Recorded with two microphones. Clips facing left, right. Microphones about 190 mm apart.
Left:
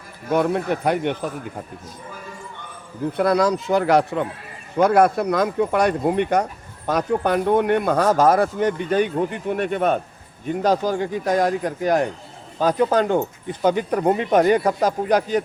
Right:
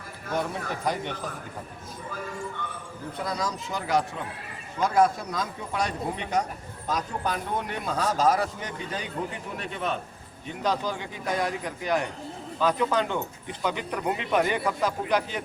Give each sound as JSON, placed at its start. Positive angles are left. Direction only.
{"t": 0.3, "sound": "speech", "side_deg": 60}
{"t": 3.2, "sound": "speech", "side_deg": 65}